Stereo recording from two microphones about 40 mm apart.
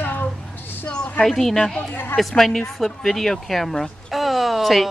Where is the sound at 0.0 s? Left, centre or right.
Left.